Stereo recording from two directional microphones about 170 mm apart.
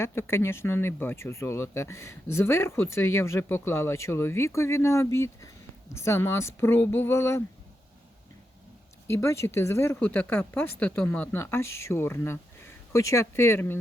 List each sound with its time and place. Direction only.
0.0 s speech: 15° left (ahead or behind)
9.0 s speech: 15° left (ahead or behind)